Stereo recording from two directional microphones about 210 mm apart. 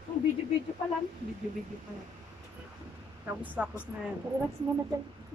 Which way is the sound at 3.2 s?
5° right (ahead or behind).